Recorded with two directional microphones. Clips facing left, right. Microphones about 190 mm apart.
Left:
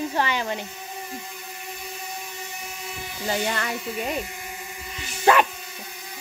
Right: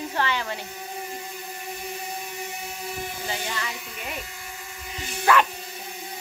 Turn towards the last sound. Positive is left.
turn(degrees=20)  # may be behind; listen again after turning